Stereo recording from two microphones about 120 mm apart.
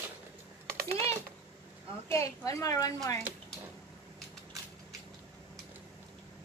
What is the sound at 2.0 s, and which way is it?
Speech, 25° left (ahead or behind).